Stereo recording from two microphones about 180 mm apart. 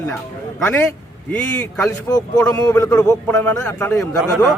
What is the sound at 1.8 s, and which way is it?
A man's voice, 20° left (ahead or behind).